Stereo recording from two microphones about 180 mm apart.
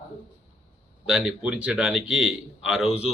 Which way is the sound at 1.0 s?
5° right (ahead or behind).